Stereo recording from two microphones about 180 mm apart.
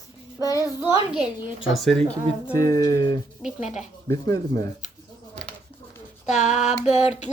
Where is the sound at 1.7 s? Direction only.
Centre (ahead or behind).